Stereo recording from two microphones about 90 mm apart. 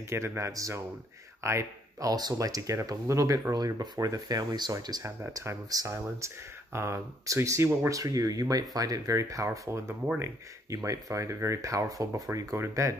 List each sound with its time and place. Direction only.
0.1 s speech: 30° right (ahead or behind); by 5.0 s 50° right (ahead or behind)
5.0 s speech: 30° right (ahead or behind)
8.0 s speech: 40° right (ahead or behind)